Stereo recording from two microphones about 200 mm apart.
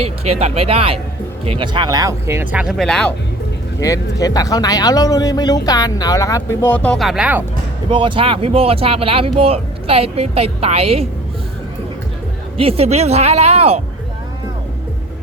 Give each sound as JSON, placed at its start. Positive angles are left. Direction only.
{"t": 0.0, "sound": "speech", "side_deg": -30}
{"t": 3.8, "sound": "speech", "side_deg": 15}
{"t": 7.9, "sound": "speech", "side_deg": -25}
{"t": 12.5, "sound": "speech", "side_deg": -30}